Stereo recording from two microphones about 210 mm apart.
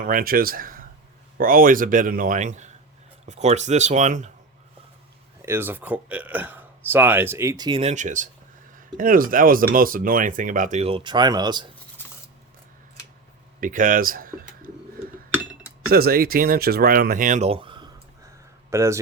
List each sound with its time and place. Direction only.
0.0 s speech: 40° right (ahead or behind)
5.4 s speech: 10° right (ahead or behind)
13.6 s speech: 40° right (ahead or behind)
15.9 s speech: 45° right (ahead or behind); by 18.9 s 15° right (ahead or behind)